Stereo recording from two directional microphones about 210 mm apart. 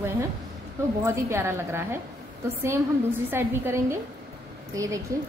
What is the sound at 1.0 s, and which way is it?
A woman's voice, 10° right (ahead or behind).